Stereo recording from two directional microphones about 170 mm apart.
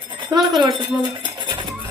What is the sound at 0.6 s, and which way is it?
Speech, 30° right (ahead or behind).